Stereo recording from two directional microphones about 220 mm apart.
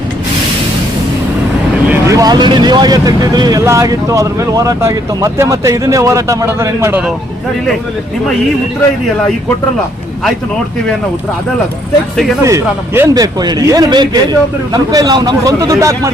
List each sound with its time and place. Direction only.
1.9 s speech: 15° right (ahead or behind)
12.4 s speech: 15° right (ahead or behind)